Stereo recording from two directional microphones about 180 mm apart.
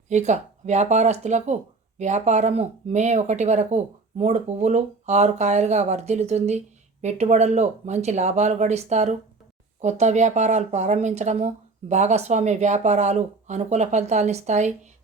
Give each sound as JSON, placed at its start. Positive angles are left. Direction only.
{"t": 0.1, "sound": "speech", "side_deg": -40}